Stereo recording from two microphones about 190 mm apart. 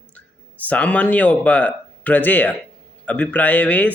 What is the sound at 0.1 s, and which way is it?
Speech, 5° left (ahead or behind).